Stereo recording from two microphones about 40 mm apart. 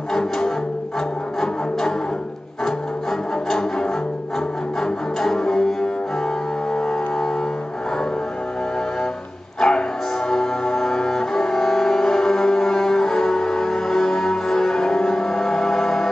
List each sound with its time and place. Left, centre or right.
1.4 s music: centre
6.7 s a sound: centre
9.6 s music: centre